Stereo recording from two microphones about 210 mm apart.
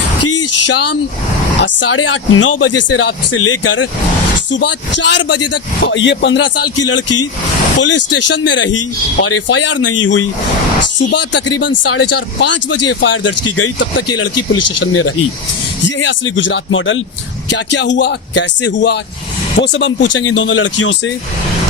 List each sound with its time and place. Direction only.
0.3 s speech: 90° left
1.6 s speech: 60° left (ahead or behind); by 3.0 s 80° left
3.3 s speech: 90° left
4.6 s speech: 60° left (ahead or behind); by 7.3 s 75° left (ahead or behind)
7.8 s speech: 60° left (ahead or behind); by 10.2 s 80° left
11.1 s speech: 55° left (ahead or behind)
11.6 s speech: 75° left (ahead or behind)
12.4 s speech: 60° left (ahead or behind); by 13.8 s 75° left (ahead or behind)
14.2 s speech: 90° left
16.0 s speech: 60° left (ahead or behind)